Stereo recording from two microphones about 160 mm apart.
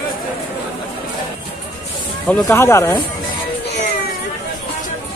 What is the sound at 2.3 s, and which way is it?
Speech, 15° left (ahead or behind).